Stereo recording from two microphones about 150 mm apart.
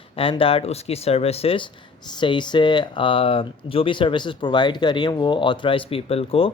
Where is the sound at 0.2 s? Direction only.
35° left (ahead or behind).